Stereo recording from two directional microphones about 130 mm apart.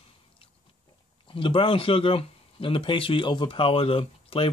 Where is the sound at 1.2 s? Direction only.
40° left (ahead or behind).